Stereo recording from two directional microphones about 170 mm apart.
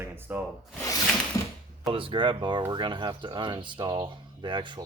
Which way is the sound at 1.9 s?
30° right (ahead or behind).